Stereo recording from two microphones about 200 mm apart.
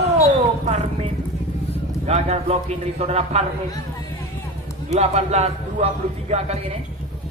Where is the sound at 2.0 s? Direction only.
30° right (ahead or behind).